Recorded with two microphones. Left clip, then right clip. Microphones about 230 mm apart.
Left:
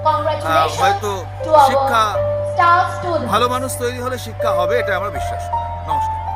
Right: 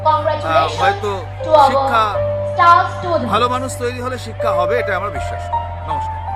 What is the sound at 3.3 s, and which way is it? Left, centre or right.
A man's voice, centre.